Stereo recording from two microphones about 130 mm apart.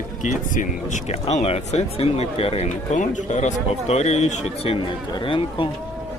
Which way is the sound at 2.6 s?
75° left (ahead or behind).